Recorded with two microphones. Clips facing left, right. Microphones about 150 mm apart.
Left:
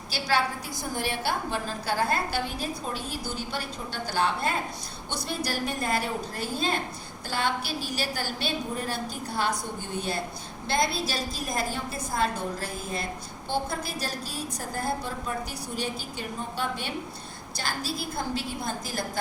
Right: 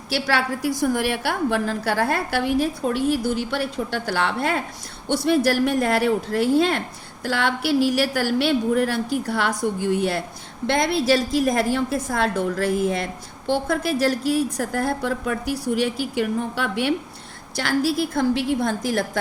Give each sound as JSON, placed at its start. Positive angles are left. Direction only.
{"t": 0.1, "sound": "a woman's voice", "side_deg": -75}